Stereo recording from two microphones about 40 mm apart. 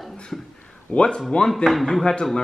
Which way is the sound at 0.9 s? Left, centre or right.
Left.